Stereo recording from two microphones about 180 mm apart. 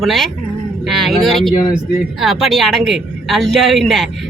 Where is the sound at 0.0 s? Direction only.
Centre (ahead or behind).